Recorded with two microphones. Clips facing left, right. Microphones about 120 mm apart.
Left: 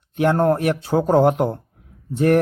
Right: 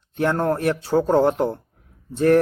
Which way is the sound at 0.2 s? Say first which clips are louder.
Left 3 dB; 15° left (ahead or behind).